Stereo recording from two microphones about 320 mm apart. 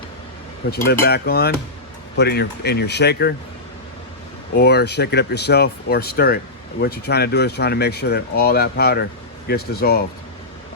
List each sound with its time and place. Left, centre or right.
0.6 s speech: left
4.5 s speech: left